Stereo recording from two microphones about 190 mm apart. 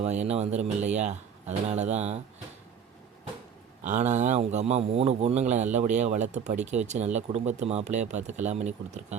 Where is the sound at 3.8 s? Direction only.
40° right (ahead or behind).